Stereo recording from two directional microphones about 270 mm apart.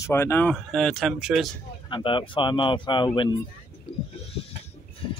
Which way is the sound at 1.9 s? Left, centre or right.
Centre.